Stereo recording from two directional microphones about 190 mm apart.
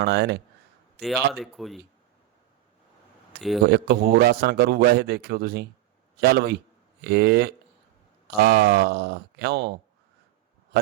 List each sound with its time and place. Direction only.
0.0 s a man's voice: 60° right (ahead or behind)
0.9 s speech: centre (ahead or behind)
3.6 s a man's voice: 60° right (ahead or behind)